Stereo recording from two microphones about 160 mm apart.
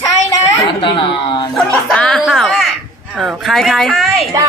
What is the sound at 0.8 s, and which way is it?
Speech, 30° left (ahead or behind).